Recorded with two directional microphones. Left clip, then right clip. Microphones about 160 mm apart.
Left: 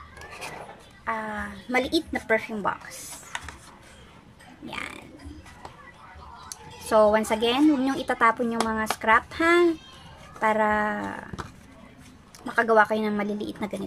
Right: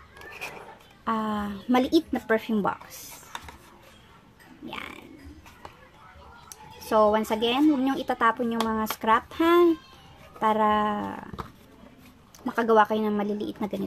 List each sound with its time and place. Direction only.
1.0 s a woman's voice: 20° right (ahead or behind)
4.6 s music: 5° right (ahead or behind)
6.5 s a woman's voice: 5° right (ahead or behind)
12.4 s a woman's voice: 10° right (ahead or behind)